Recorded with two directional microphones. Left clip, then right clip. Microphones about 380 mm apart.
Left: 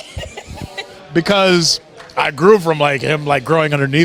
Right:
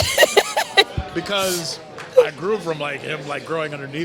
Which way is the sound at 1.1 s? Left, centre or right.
Left.